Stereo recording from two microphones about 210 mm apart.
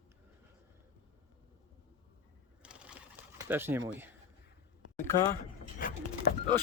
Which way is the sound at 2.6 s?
5° right (ahead or behind).